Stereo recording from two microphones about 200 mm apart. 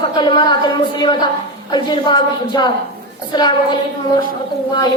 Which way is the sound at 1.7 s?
20° left (ahead or behind).